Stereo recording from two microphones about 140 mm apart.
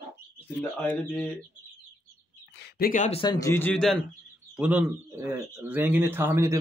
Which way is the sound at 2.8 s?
70° left (ahead or behind).